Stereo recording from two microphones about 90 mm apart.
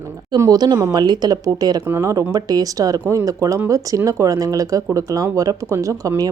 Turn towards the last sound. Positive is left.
turn(degrees=-40)  # may be behind; listen again after turning